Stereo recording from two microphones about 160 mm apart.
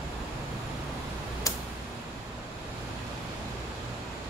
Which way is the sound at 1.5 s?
20° left (ahead or behind).